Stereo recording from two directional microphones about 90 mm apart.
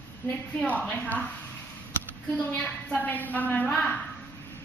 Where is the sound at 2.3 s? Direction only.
15° left (ahead or behind).